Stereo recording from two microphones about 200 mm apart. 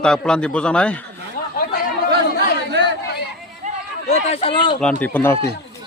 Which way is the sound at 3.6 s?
35° right (ahead or behind).